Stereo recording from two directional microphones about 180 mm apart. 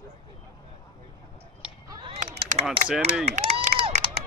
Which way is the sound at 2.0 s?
35° right (ahead or behind).